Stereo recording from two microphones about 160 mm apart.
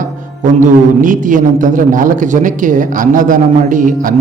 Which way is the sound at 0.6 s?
55° right (ahead or behind).